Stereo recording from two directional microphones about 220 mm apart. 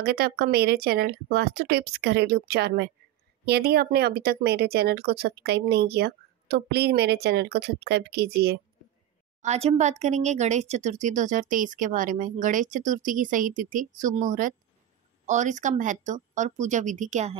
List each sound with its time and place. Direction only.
0.0 s speech: 45° right (ahead or behind)
9.4 s speech: 30° right (ahead or behind)